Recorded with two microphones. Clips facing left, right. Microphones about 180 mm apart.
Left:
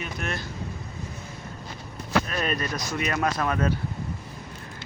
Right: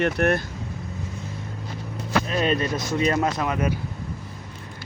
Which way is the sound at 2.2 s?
25° right (ahead or behind).